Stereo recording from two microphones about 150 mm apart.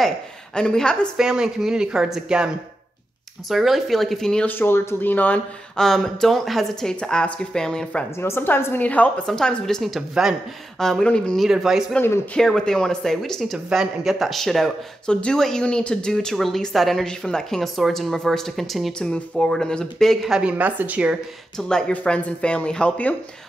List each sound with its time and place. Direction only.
0.6 s speech: 5° left (ahead or behind)
8.2 s a woman's voice: 15° left (ahead or behind); by 21.2 s 10° right (ahead or behind)
21.5 s a woman's voice: 5° left (ahead or behind)